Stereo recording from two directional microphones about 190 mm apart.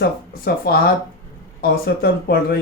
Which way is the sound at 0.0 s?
55° left (ahead or behind).